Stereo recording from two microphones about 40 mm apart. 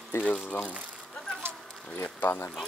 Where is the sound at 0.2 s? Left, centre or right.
Left.